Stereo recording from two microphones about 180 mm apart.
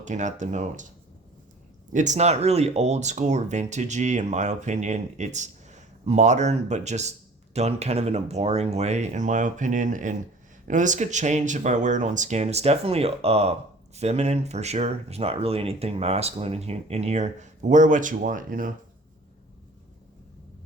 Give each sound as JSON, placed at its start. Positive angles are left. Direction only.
{"t": 0.0, "sound": "speech", "side_deg": -40}
{"t": 1.9, "sound": "speech", "side_deg": -45}